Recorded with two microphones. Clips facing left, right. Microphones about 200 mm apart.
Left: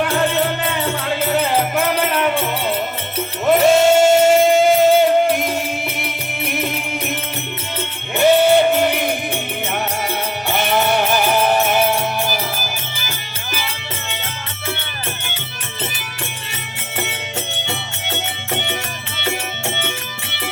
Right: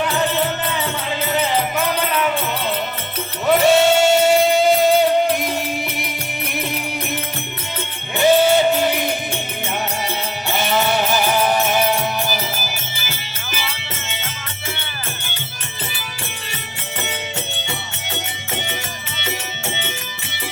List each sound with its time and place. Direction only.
1.5 s music: 55° left (ahead or behind)
3.5 s music: centre (ahead or behind)
3.8 s music: 50° left (ahead or behind)
5.3 s music: centre (ahead or behind)
8.2 s music: 55° left (ahead or behind)
10.5 s music: 55° left (ahead or behind)
13.1 s music: 50° left (ahead or behind)